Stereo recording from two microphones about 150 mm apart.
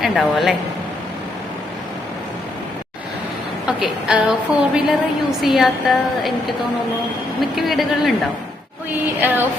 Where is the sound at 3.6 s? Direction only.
5° right (ahead or behind).